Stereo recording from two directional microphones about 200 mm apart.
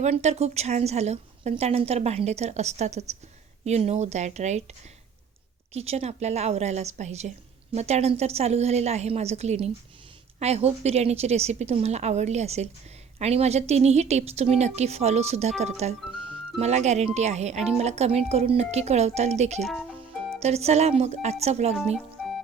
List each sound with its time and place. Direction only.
0.0 s a woman's voice: 35° right (ahead or behind)
5.7 s a woman's voice: 30° right (ahead or behind)
19.6 s speech: centre (ahead or behind)
20.4 s a woman's voice: 30° right (ahead or behind)